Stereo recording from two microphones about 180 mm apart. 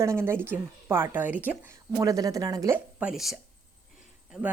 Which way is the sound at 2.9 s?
5° right (ahead or behind).